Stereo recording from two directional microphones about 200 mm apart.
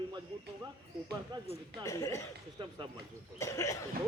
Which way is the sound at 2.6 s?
25° right (ahead or behind).